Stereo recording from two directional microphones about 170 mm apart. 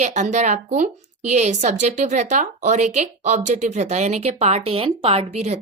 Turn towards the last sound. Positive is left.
turn(degrees=-40)  # may be behind; listen again after turning